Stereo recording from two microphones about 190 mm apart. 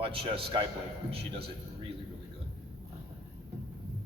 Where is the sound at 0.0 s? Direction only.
30° right (ahead or behind).